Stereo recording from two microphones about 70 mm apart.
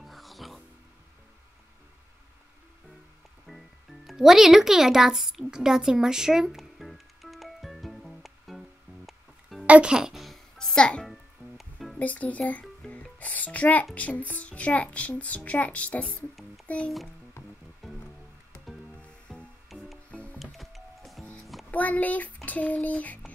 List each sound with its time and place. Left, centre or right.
0.0 s music: centre
3.4 s music: centre
9.7 s music: centre
11.1 s music: centre
12.0 s speech: left
12.9 s music: left
13.9 s a child's voice: left
17.8 s music: centre
18.9 s music: centre
19.7 s music: centre
20.1 s music: centre
20.5 s music: centre
21.6 s a child's voice: left